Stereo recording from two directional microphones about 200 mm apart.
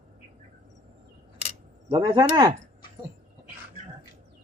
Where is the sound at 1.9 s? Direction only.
25° right (ahead or behind).